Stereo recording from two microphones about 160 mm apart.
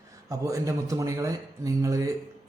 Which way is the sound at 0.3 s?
20° right (ahead or behind).